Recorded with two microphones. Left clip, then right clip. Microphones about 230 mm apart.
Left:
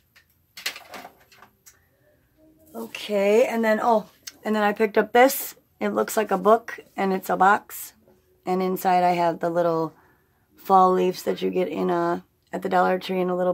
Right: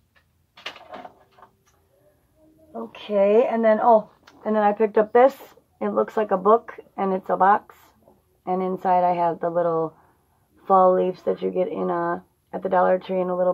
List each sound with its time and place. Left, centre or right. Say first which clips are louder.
2.7 s speech: right 1 dB; left